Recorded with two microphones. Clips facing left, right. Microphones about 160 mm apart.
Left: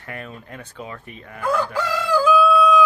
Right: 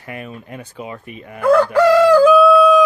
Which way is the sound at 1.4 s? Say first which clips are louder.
Right 10 dB; 65° right (ahead or behind).